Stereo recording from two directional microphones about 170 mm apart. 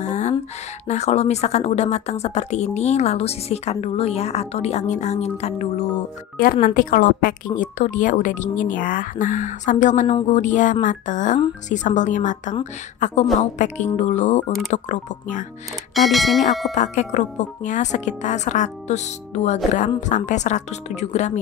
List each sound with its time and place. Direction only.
0.0 s music: 45° left (ahead or behind)
0.8 s speech: 40° left (ahead or behind)
6.3 s a woman's voice: 55° left (ahead or behind)
15.9 s speech: centre (ahead or behind)
16.7 s a woman's voice: 45° left (ahead or behind)